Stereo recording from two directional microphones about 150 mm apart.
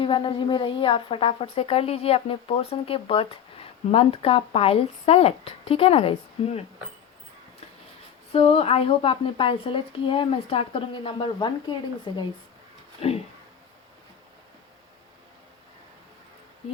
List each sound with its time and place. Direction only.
0.0 s a woman's voice: 35° left (ahead or behind)
8.3 s a woman's voice: 40° left (ahead or behind)
13.0 s speech: 40° left (ahead or behind)